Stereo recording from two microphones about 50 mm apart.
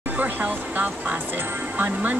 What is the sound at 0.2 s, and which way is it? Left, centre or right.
Music, right.